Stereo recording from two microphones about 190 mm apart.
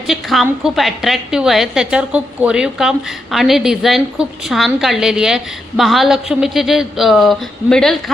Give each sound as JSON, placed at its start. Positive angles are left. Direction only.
{"t": 0.1, "sound": "a woman's voice", "side_deg": 0}